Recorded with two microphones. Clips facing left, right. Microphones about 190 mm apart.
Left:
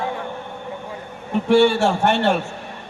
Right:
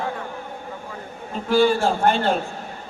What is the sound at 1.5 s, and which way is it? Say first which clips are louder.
Speech: left 3 dB; 75° left (ahead or behind).